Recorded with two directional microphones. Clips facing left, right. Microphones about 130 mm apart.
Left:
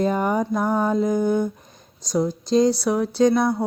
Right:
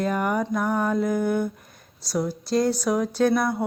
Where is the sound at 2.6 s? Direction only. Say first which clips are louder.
Left 3 dB; 10° left (ahead or behind).